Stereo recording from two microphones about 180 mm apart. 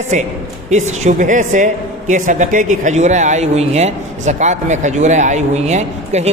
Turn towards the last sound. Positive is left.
turn(degrees=-40)  # may be behind; listen again after turning